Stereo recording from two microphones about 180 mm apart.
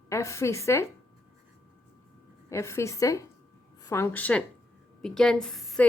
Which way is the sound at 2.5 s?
15° left (ahead or behind).